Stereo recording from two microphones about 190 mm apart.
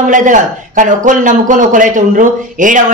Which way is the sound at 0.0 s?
40° right (ahead or behind).